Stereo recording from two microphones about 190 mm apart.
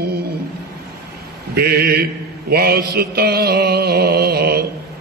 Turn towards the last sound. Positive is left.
turn(degrees=-55)  # may be behind; listen again after turning